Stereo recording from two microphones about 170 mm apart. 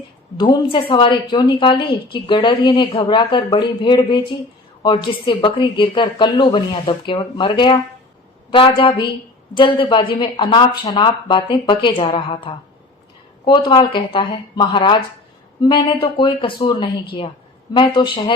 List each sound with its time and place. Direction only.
0.3 s a woman's voice: 30° left (ahead or behind)